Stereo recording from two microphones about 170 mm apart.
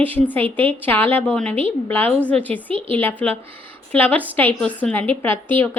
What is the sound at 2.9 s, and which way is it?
A woman's voice, 10° left (ahead or behind).